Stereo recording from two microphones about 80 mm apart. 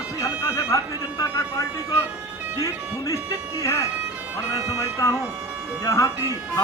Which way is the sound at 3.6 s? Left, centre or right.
Left.